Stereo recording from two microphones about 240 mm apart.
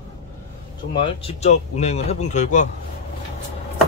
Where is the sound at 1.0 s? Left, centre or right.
Left.